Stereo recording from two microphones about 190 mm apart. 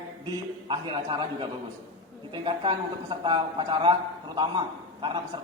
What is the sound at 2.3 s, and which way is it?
A man's voice, 25° right (ahead or behind).